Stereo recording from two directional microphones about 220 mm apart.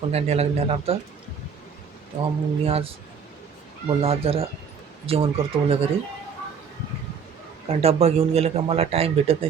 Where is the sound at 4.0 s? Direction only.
25° right (ahead or behind).